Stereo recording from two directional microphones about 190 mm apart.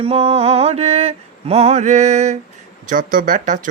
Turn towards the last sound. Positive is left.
turn(degrees=-40)  # may be behind; listen again after turning